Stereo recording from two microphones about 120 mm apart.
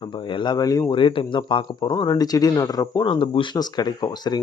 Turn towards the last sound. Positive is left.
turn(degrees=35)  # may be behind; listen again after turning